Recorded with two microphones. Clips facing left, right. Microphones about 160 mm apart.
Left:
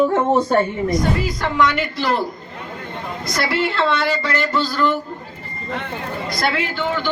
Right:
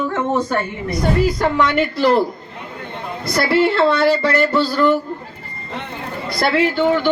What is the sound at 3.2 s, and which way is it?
Speech, 30° right (ahead or behind).